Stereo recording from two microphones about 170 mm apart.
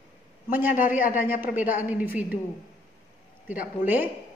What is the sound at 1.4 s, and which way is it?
Speech, 10° right (ahead or behind).